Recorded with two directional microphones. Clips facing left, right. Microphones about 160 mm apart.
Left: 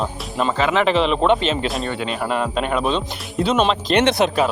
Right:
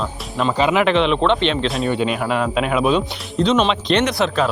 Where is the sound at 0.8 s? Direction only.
Centre (ahead or behind).